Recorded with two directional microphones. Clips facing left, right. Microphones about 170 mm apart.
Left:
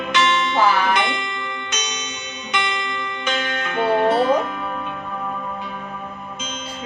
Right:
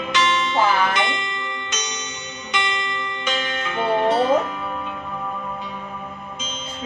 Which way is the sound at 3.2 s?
55° left (ahead or behind).